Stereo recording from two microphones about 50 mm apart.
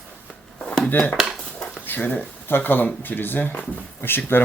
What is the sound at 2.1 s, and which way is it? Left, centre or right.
Speech, left.